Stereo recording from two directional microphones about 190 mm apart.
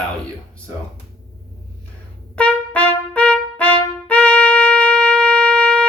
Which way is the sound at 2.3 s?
10° left (ahead or behind).